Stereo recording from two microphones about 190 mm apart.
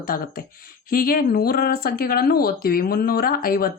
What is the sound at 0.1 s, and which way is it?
Speech, 50° left (ahead or behind).